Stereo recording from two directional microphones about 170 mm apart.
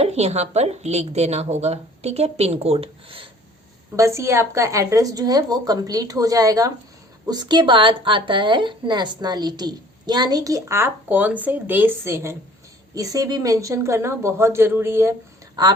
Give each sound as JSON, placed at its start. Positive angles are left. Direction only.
{"t": 0.0, "sound": "speech", "side_deg": -40}
{"t": 3.9, "sound": "a woman's voice", "side_deg": -15}